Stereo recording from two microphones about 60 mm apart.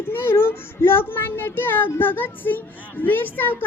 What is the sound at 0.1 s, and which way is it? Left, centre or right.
A child's voice, left.